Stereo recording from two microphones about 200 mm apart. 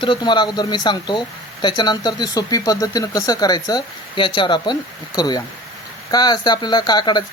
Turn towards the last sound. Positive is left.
turn(degrees=20)  # may be behind; listen again after turning